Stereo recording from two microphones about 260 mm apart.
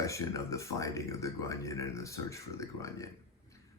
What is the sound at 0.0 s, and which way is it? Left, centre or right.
Speech, centre.